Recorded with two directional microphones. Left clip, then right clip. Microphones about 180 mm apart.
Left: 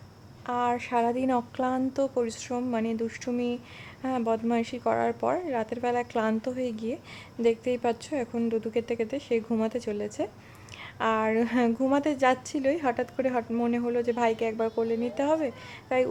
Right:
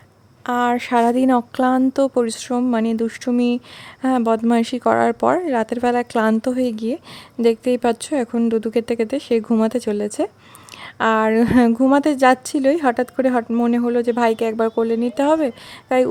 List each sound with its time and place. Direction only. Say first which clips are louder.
0.4 s a woman's voice: right 9 dB; 45° right (ahead or behind)